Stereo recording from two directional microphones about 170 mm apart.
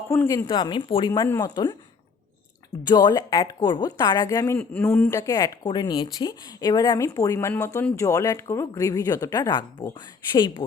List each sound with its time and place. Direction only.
0.1 s speech: 20° left (ahead or behind)
2.8 s speech: 25° left (ahead or behind)